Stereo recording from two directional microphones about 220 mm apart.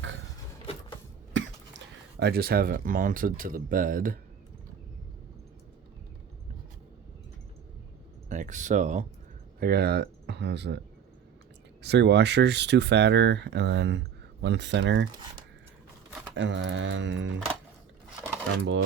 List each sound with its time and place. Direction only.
1.3 s a sound: 55° right (ahead or behind)
2.1 s speech: 45° right (ahead or behind)
8.3 s speech: 35° right (ahead or behind)
9.6 s speech: 45° right (ahead or behind)
11.8 s speech: 50° right (ahead or behind)
16.3 s speech: 55° right (ahead or behind)
18.5 s speech: 55° right (ahead or behind)